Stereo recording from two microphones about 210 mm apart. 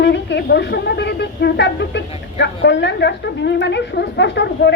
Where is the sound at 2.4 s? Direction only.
55° left (ahead or behind).